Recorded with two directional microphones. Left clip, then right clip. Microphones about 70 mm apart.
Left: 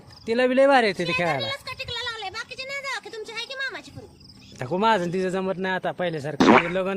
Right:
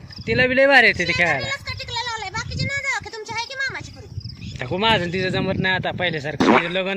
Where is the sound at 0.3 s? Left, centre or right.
Left.